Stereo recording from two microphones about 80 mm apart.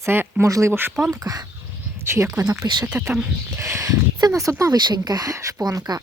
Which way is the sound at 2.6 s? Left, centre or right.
Right.